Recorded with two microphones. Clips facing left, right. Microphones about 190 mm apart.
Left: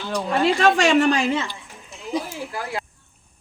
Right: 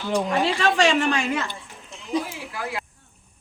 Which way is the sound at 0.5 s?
45° left (ahead or behind).